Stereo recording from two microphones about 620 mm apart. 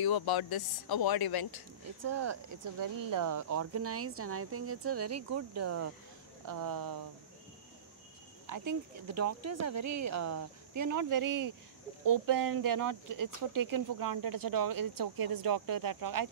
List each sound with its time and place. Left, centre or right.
0.0 s speech: left
2.0 s speech: right
8.5 s speech: right